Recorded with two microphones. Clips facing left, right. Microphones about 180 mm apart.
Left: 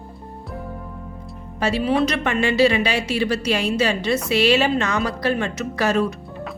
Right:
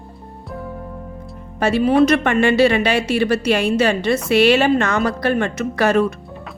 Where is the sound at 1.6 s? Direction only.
50° right (ahead or behind).